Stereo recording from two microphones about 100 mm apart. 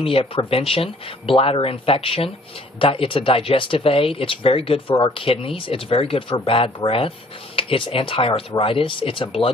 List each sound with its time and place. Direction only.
0.0 s speech: 70° left (ahead or behind)